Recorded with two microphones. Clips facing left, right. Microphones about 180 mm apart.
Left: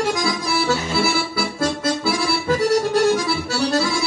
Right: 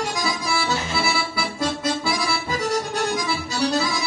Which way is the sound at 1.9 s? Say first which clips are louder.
Left 3 dB; 70° left (ahead or behind).